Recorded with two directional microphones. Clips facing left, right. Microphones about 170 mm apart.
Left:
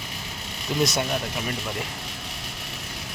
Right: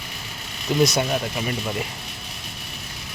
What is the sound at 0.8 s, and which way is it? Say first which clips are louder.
Speech: right 4 dB; centre (ahead or behind).